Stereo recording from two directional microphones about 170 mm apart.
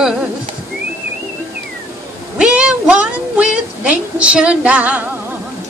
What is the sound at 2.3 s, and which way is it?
Child singing, 5° right (ahead or behind).